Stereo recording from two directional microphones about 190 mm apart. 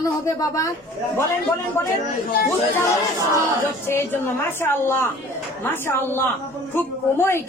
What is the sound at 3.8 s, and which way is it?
A woman's voice, 10° left (ahead or behind).